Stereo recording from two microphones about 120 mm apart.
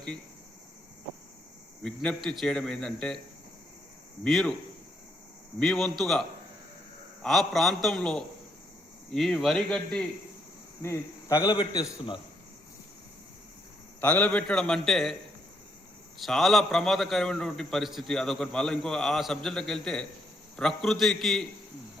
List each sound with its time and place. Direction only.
1.8 s a man's voice: 5° left (ahead or behind)
4.2 s a man's voice: centre (ahead or behind)
5.5 s a man's voice: 5° left (ahead or behind)
10.8 s speech: 25° left (ahead or behind)
11.5 s a man's voice: 40° left (ahead or behind)
14.0 s a man's voice: 10° left (ahead or behind)
16.2 s a man's voice: centre (ahead or behind)